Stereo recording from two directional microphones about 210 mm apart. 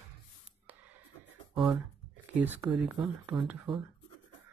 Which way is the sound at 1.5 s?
Centre (ahead or behind).